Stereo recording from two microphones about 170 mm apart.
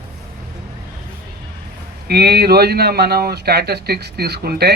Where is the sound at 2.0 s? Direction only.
70° right (ahead or behind).